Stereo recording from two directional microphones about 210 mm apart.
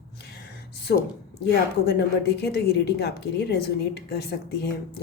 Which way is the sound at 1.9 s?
50° left (ahead or behind).